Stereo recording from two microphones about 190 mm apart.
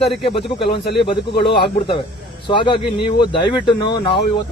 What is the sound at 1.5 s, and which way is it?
Speech, 60° left (ahead or behind).